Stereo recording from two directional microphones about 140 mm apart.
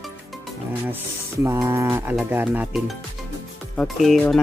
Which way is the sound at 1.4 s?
20° right (ahead or behind).